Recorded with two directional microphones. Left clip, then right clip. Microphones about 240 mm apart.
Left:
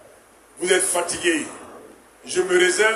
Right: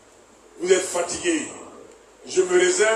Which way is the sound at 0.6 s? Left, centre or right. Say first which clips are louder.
Even; left.